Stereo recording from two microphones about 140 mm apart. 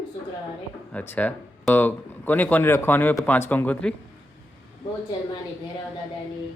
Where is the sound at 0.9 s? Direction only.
15° left (ahead or behind).